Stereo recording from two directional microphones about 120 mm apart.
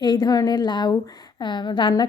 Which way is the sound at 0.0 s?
35° left (ahead or behind).